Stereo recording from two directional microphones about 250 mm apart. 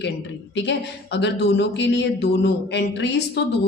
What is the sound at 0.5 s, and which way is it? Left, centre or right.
Speech, left.